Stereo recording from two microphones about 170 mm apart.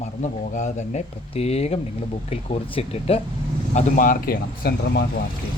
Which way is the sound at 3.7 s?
55° left (ahead or behind).